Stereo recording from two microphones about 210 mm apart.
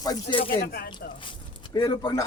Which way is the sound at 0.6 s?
45° left (ahead or behind).